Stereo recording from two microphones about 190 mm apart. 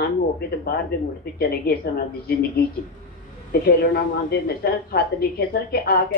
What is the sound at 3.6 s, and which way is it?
Speech, 55° left (ahead or behind).